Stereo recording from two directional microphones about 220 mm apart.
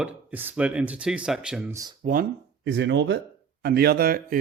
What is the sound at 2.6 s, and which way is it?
Speech, 55° right (ahead or behind).